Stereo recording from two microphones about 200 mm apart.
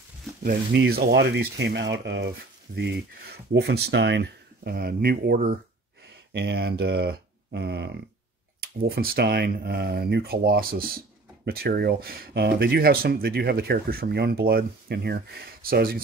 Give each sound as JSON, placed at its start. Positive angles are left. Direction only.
{"t": 0.4, "sound": "speech", "side_deg": -50}